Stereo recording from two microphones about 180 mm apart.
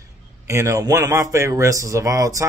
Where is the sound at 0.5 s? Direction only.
15° right (ahead or behind).